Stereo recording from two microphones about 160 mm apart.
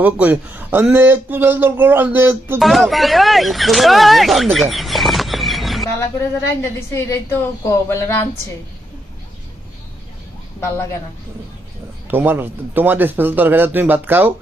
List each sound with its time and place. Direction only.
0.0 s speech: 10° right (ahead or behind)
2.6 s speech: centre (ahead or behind)
4.5 s a sound: centre (ahead or behind)
6.6 s a woman's voice: 15° left (ahead or behind)
12.1 s speech: 15° right (ahead or behind)